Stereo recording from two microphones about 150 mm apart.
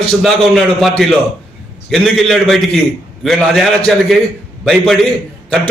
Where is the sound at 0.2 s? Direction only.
Centre (ahead or behind).